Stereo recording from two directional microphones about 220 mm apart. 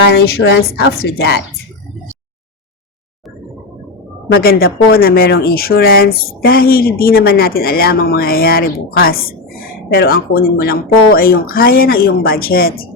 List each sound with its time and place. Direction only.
0.1 s speech: 45° left (ahead or behind)
4.3 s speech: 45° left (ahead or behind)